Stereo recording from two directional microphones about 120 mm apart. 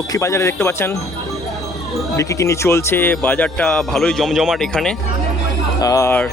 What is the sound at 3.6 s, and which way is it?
Speech, 5° left (ahead or behind).